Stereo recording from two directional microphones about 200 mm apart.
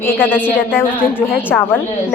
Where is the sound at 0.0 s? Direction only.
10° left (ahead or behind).